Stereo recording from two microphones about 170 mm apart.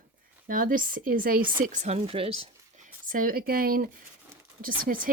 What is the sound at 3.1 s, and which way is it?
Speech, 55° right (ahead or behind).